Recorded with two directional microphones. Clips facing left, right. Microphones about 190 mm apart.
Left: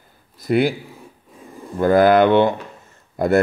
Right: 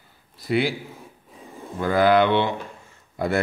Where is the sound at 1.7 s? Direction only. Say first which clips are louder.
Left 5 dB; 50° left (ahead or behind).